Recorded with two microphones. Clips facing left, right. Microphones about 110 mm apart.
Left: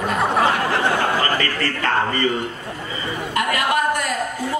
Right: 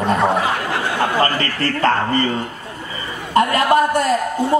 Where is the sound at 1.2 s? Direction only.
35° right (ahead or behind).